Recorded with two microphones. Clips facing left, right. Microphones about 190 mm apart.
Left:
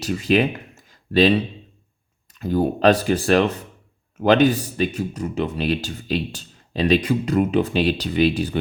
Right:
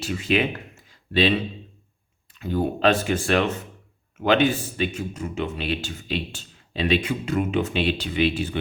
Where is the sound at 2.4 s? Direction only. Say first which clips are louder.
Left 4 dB; 40° left (ahead or behind).